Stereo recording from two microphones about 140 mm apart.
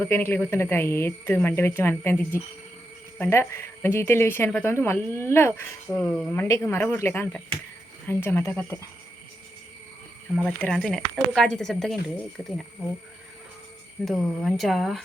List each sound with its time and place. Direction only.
0.0 s a woman's voice: 15° left (ahead or behind)
6.0 s a woman's voice: 5° left (ahead or behind)
10.3 s speech: centre (ahead or behind)
14.0 s speech: 5° left (ahead or behind)